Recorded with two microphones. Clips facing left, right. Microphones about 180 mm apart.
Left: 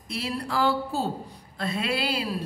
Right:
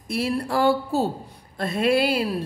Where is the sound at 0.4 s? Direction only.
55° right (ahead or behind).